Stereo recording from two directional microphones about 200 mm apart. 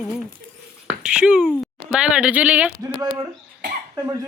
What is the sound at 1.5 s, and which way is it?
Speech, centre (ahead or behind).